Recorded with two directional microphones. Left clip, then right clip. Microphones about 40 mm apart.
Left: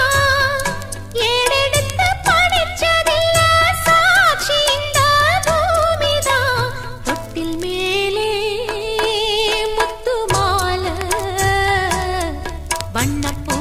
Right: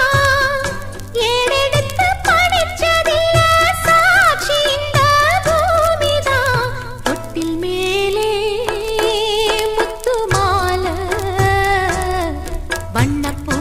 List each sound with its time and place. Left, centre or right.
0.0 s music: centre
2.3 s music of bollywood: centre
4.6 s music: right
4.9 s music: centre